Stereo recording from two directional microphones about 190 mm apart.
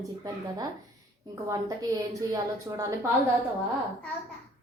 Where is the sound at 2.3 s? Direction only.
15° right (ahead or behind).